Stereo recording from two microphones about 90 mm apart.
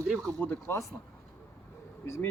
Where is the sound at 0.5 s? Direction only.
30° left (ahead or behind).